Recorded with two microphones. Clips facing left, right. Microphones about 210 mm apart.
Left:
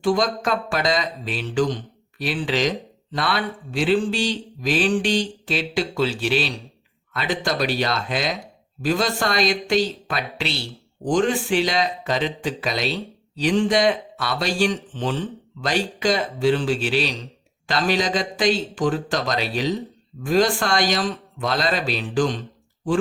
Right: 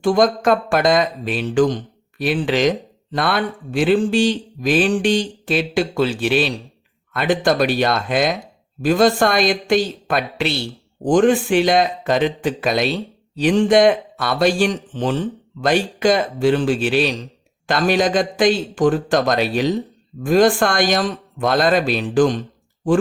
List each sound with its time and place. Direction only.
0.0 s speech: 50° right (ahead or behind)